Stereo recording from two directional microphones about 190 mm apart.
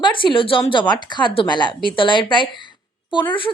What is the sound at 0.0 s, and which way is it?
A woman's voice, 25° left (ahead or behind).